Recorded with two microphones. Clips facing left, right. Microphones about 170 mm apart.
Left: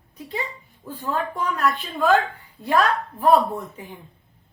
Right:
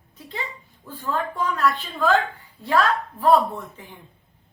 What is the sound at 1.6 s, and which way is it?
A woman's voice, 15° left (ahead or behind).